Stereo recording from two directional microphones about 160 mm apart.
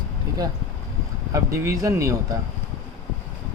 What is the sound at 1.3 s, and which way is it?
Speech, 20° right (ahead or behind).